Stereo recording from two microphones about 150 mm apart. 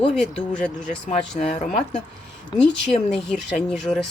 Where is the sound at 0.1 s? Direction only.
5° left (ahead or behind).